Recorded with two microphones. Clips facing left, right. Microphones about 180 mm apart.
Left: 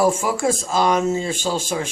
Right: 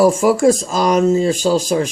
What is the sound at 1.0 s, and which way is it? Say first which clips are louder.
Speech: right 8 dB; 35° right (ahead or behind).